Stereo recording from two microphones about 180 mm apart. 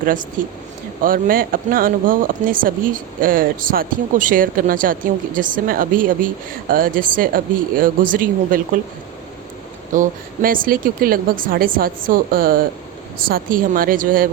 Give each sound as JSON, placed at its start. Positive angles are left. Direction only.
{"t": 0.0, "sound": "speech", "side_deg": -50}
{"t": 9.9, "sound": "speech", "side_deg": -50}